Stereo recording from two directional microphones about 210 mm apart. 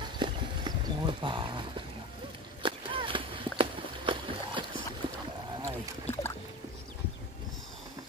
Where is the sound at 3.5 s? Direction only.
25° right (ahead or behind).